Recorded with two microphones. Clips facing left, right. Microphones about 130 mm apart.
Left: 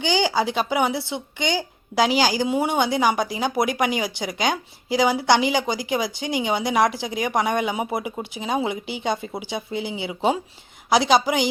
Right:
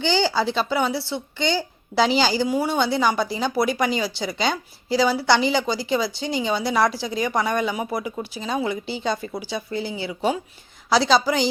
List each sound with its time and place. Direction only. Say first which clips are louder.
0.0 s speech: even; 15° left (ahead or behind)